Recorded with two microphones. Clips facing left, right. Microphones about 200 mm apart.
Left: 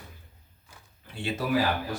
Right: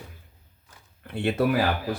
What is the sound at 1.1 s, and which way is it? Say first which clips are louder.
Speech: right 8 dB; 55° right (ahead or behind).